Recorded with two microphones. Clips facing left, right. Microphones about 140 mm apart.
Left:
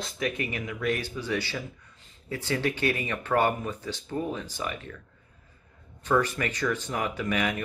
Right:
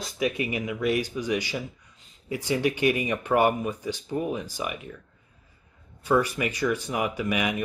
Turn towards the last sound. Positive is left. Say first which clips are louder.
# right 2 dB
turn(degrees=-10)  # may be behind; listen again after turning